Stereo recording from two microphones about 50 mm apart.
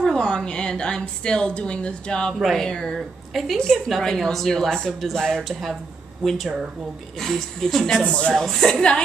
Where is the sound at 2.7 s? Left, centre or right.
Centre.